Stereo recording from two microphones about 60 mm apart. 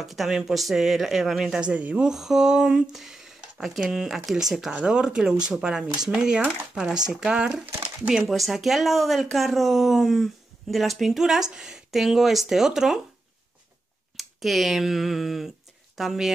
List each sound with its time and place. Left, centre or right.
0.0 s speech: centre
1.6 s speech: right
2.0 s speech: centre
8.3 s speech: centre
14.1 s speech: centre